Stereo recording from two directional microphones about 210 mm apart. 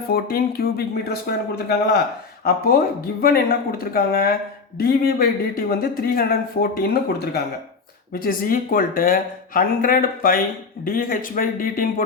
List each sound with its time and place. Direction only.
0.1 s a man's voice: 45° left (ahead or behind)